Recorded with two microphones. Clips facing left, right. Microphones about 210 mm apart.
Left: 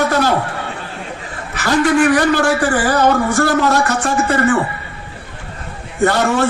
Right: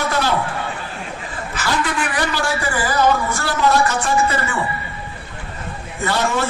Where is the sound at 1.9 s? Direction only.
45° left (ahead or behind).